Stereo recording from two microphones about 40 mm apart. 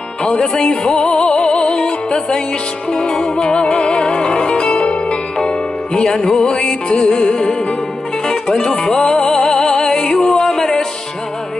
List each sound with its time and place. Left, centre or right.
0.4 s music: centre
5.9 s music: centre